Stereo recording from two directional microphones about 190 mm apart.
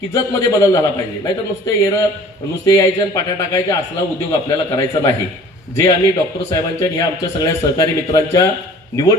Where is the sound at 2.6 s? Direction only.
20° left (ahead or behind).